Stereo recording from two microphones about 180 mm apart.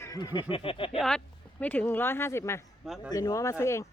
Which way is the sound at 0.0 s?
20° left (ahead or behind).